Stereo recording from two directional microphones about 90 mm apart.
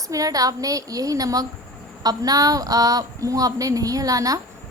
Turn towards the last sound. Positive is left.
turn(degrees=-40)  # may be behind; listen again after turning